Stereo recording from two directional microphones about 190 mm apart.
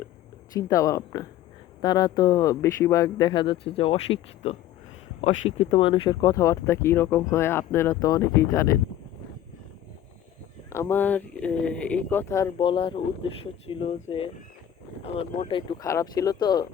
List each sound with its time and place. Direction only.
0.5 s speech: 15° left (ahead or behind)
10.7 s speech: 15° left (ahead or behind)
12.5 s speech: 25° left (ahead or behind)